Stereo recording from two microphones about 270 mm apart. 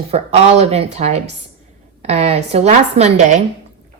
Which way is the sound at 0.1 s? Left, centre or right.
Right.